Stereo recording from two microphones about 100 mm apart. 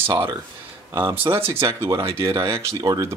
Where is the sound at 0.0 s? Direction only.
20° right (ahead or behind).